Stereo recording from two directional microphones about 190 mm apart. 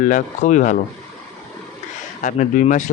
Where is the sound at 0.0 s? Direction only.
40° left (ahead or behind).